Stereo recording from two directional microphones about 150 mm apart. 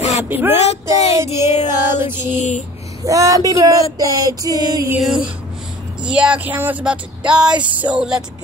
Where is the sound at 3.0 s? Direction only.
20° right (ahead or behind).